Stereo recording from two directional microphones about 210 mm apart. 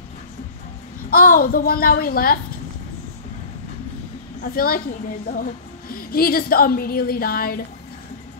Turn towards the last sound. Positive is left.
turn(degrees=45)  # may be behind; listen again after turning